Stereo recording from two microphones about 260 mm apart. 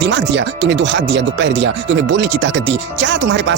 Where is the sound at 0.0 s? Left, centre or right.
Right.